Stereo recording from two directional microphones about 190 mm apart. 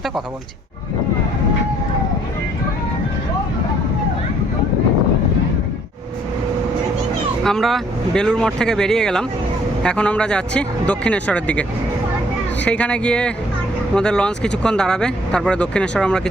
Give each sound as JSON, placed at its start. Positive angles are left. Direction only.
{"t": 7.4, "sound": "speech", "side_deg": 0}